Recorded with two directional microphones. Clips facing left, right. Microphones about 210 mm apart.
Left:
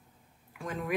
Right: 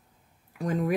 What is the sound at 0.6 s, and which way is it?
Speech, 40° right (ahead or behind).